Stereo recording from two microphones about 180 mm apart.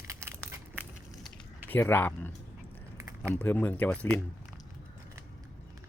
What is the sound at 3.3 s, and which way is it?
Speech, 10° left (ahead or behind).